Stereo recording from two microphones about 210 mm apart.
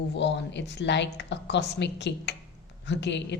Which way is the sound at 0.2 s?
55° left (ahead or behind).